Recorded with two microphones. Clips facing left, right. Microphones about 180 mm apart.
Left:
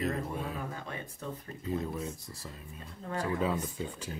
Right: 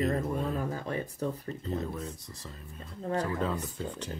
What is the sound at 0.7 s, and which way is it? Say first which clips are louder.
Speech: right 7 dB; 35° right (ahead or behind).